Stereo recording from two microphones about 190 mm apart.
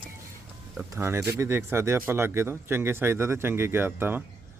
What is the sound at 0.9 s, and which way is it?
Speech, 15° right (ahead or behind).